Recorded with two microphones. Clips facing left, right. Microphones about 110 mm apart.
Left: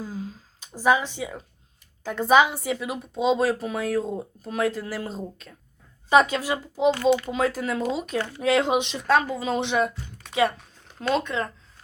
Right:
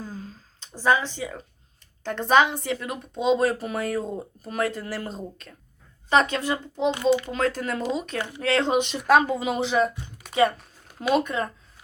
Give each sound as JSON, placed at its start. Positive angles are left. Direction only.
{"t": 0.0, "sound": "a sound", "side_deg": 10}
{"t": 2.0, "sound": "a child's voice", "side_deg": 5}
{"t": 9.0, "sound": "speech", "side_deg": -20}
{"t": 9.5, "sound": "speech", "side_deg": 0}